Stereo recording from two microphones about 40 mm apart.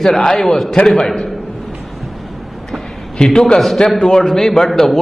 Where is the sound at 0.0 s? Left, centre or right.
Centre.